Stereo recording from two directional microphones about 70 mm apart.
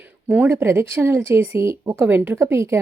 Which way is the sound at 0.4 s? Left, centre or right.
Right.